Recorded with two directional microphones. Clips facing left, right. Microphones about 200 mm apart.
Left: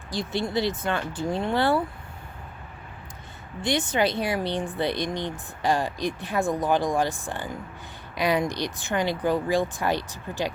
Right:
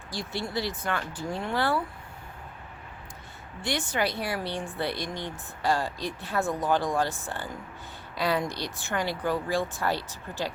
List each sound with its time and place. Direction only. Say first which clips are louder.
0.1 s speech: left 5 dB; 20° left (ahead or behind)
3.6 s speech: left 5 dB; 20° left (ahead or behind)